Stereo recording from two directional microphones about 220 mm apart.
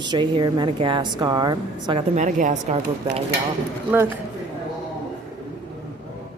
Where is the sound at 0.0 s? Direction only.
20° right (ahead or behind).